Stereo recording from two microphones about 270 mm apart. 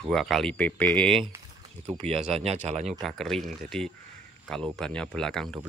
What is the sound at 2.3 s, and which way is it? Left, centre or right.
Speech, right.